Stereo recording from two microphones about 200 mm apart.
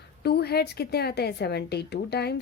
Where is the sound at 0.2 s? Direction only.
55° left (ahead or behind).